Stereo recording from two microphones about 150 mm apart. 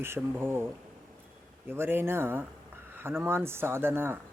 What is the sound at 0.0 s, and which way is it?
Speech, 15° right (ahead or behind).